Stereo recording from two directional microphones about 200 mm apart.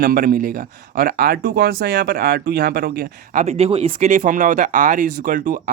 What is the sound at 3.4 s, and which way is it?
Speech, 30° right (ahead or behind).